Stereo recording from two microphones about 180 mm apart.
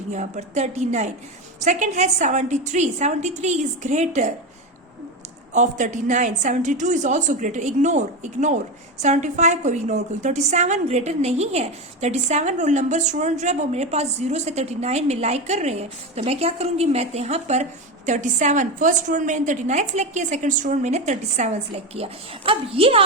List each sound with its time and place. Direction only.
0.1 s a woman's voice: 40° right (ahead or behind)
5.5 s a woman's voice: 40° right (ahead or behind)